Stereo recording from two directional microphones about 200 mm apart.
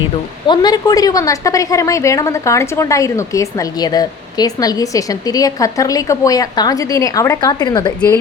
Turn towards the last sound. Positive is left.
turn(degrees=20)  # may be behind; listen again after turning